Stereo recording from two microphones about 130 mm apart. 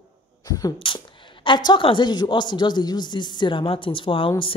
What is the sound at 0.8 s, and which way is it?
Speech, 40° left (ahead or behind).